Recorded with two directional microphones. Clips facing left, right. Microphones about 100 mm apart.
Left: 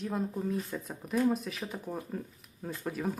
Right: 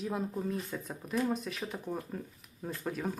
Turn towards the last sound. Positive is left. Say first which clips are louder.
# left 1 dB
turn(degrees=0)  # may be behind; listen again after turning